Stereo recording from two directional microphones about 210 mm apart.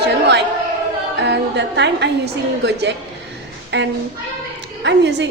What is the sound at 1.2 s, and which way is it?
A woman's voice, 55° right (ahead or behind).